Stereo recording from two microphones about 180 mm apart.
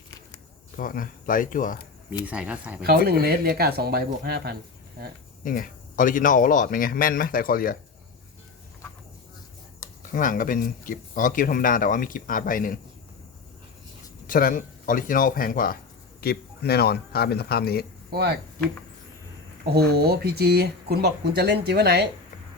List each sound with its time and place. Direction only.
0.8 s speech: 50° left (ahead or behind)
2.2 s speech: 5° right (ahead or behind)
2.8 s speech: 60° right (ahead or behind)
5.4 s speech: 50° left (ahead or behind)
10.0 s speech: 50° left (ahead or behind)
14.3 s speech: 50° left (ahead or behind)
18.1 s speech: 60° right (ahead or behind)
19.7 s speech: 60° right (ahead or behind)